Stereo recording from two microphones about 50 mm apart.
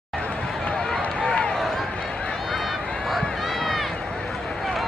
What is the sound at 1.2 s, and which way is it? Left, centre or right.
Run, centre.